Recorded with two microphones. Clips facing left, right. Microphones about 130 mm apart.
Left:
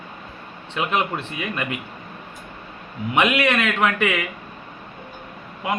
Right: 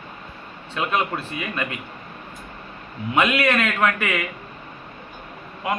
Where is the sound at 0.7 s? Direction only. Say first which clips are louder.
Left 1 dB; 20° left (ahead or behind).